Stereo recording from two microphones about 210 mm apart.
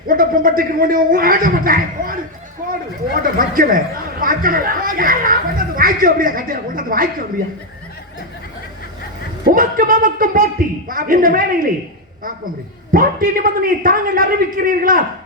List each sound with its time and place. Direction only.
0.1 s speech: 45° right (ahead or behind)
2.6 s a sound: 40° right (ahead or behind)
3.3 s a man's voice: 40° right (ahead or behind)
9.4 s a man's voice: 45° right (ahead or behind)
12.9 s speech: 40° right (ahead or behind)